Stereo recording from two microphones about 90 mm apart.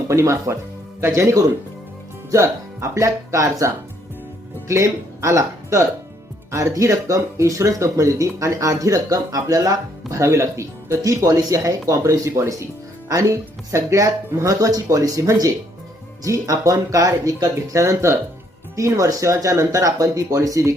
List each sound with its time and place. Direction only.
0.1 s speech: 30° right (ahead or behind)
4.7 s speech: 35° right (ahead or behind)